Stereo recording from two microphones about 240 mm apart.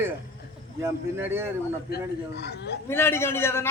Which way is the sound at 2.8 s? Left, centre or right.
Centre.